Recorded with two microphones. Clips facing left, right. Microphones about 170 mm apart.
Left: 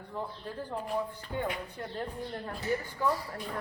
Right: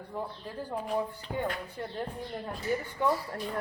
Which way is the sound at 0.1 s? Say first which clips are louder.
Even; 10° right (ahead or behind).